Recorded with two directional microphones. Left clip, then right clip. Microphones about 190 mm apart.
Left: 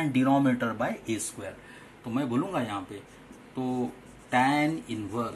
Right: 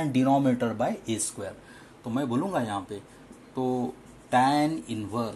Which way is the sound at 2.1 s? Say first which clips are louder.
Right 1 dB; 40° right (ahead or behind).